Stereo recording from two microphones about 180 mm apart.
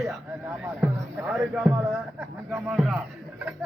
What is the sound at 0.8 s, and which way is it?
Speech, 5° right (ahead or behind).